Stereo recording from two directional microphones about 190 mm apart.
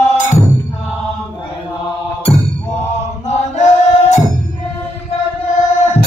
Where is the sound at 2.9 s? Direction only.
35° left (ahead or behind).